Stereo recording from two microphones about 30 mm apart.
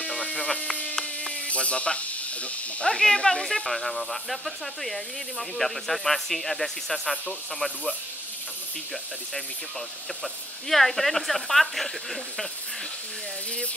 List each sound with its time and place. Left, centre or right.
1.5 s snake: left
2.8 s speech: left
3.4 s speech: centre
10.2 s speech: centre